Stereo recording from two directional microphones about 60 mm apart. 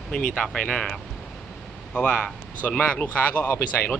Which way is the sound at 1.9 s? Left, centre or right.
Left.